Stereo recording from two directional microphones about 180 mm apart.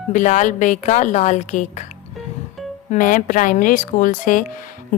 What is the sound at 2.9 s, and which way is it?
A woman's voice, 50° left (ahead or behind).